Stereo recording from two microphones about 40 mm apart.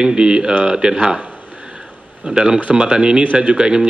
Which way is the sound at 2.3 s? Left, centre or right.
Centre.